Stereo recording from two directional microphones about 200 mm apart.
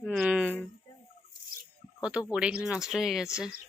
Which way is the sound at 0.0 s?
Centre (ahead or behind).